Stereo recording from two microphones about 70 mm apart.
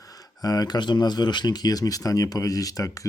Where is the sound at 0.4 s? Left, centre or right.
Left.